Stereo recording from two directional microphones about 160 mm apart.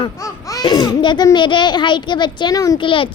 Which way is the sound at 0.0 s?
20° left (ahead or behind).